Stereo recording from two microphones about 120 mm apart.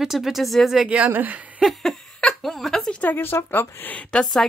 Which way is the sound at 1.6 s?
Centre (ahead or behind).